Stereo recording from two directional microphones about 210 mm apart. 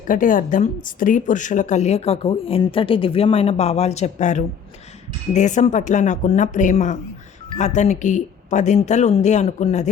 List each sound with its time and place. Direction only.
0.1 s speech: 40° left (ahead or behind)